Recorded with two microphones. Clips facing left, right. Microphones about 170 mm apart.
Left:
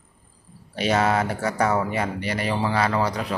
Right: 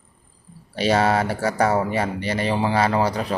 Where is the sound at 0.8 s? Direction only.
30° right (ahead or behind).